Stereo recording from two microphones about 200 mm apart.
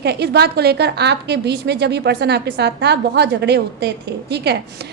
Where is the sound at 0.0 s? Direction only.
55° right (ahead or behind).